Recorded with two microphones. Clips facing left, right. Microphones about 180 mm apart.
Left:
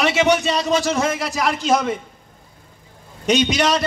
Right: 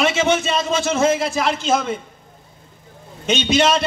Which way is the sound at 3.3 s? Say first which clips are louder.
Even; 25° right (ahead or behind).